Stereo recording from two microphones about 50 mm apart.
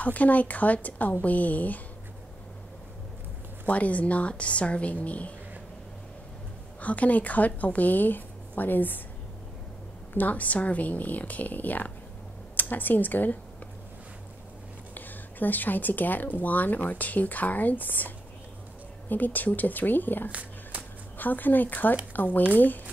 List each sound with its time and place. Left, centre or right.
0.0 s speech: left
3.6 s a woman's voice: left
6.8 s speech: left
10.1 s speech: left
15.0 s speech: left
20.2 s a sound: right
21.2 s speech: left